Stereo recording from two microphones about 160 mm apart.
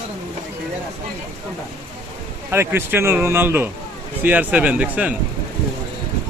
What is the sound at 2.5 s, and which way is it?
A man's voice, 15° right (ahead or behind).